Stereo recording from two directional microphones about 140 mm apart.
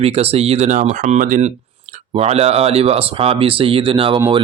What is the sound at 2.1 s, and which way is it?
Speech, 50° right (ahead or behind).